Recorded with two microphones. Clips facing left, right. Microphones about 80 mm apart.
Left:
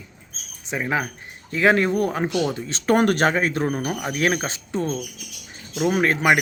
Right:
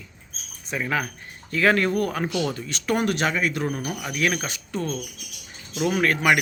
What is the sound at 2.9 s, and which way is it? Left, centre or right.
Speech, left.